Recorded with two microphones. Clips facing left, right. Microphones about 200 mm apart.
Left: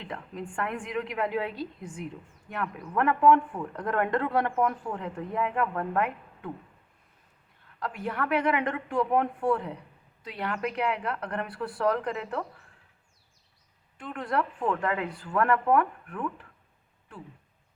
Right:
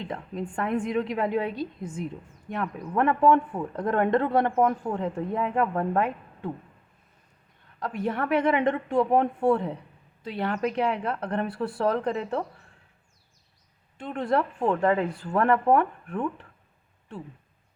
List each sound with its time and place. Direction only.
0.0 s speech: 25° right (ahead or behind)
7.8 s speech: 25° right (ahead or behind)
14.0 s speech: 25° right (ahead or behind)